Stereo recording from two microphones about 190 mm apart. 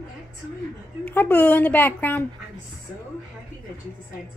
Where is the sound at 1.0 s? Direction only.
10° left (ahead or behind).